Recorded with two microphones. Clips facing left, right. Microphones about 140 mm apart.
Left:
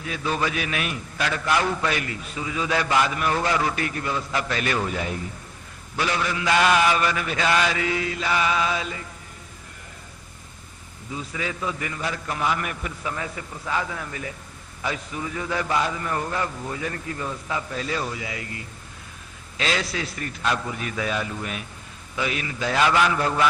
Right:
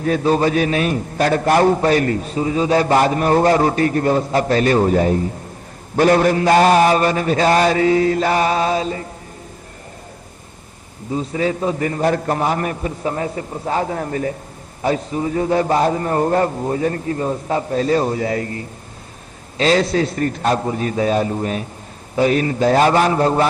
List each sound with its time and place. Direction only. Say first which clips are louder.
0.0 s a man's voice: right 11 dB; 45° right (ahead or behind)
11.1 s a man's voice: right 11 dB; 40° right (ahead or behind)